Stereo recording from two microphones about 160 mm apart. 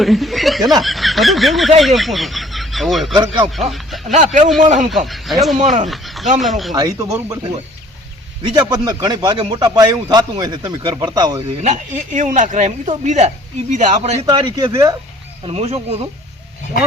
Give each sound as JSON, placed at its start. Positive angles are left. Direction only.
{"t": 0.0, "sound": "speech", "side_deg": 0}
{"t": 3.2, "sound": "speech", "side_deg": -30}
{"t": 4.1, "sound": "speech", "side_deg": -45}
{"t": 4.9, "sound": "speech", "side_deg": 0}
{"t": 6.7, "sound": "speech", "side_deg": -25}
{"t": 8.5, "sound": "speech", "side_deg": -25}
{"t": 11.6, "sound": "speech", "side_deg": -50}
{"t": 14.3, "sound": "speech", "side_deg": -25}
{"t": 15.4, "sound": "speech", "side_deg": -40}